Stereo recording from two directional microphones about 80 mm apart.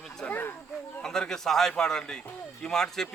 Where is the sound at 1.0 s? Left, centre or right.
Centre.